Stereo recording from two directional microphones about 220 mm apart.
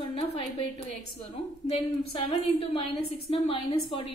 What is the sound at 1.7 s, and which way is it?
A woman's voice, 25° left (ahead or behind).